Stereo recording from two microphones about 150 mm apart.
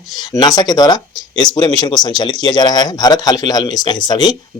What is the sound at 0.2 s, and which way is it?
Speech, 25° left (ahead or behind).